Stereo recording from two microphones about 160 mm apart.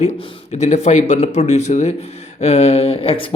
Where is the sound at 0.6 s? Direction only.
45° left (ahead or behind).